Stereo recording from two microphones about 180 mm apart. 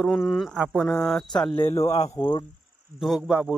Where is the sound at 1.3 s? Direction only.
25° left (ahead or behind).